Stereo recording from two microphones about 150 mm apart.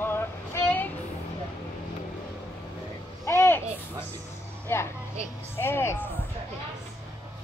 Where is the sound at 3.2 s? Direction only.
15° left (ahead or behind).